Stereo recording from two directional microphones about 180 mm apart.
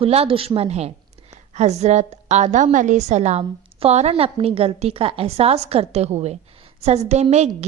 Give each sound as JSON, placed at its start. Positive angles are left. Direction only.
{"t": 0.0, "sound": "a woman's voice", "side_deg": -30}